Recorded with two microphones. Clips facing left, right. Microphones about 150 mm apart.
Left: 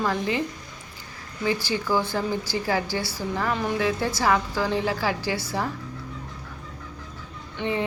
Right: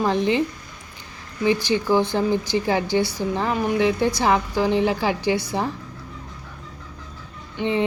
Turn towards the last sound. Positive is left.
turn(degrees=-20)  # may be behind; listen again after turning